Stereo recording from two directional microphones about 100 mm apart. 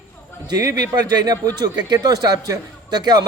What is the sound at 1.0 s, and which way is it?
A man's voice, 40° right (ahead or behind).